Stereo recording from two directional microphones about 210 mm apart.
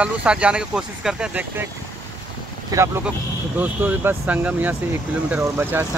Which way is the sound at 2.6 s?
15° right (ahead or behind).